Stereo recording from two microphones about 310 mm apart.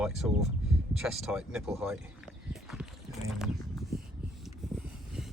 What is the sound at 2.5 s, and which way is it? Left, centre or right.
Walk, centre.